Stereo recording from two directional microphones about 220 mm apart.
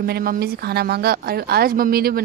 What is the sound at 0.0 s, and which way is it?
Speech, 45° right (ahead or behind).